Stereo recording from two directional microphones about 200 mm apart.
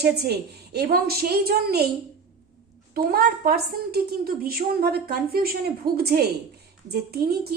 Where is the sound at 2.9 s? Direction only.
50° right (ahead or behind).